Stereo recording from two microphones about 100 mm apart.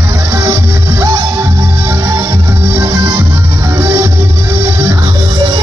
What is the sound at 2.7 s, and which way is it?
Music, 35° right (ahead or behind).